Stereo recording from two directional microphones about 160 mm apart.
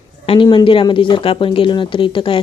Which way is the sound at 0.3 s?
30° left (ahead or behind).